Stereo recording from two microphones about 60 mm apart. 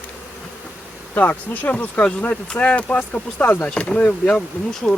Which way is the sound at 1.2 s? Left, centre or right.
Left.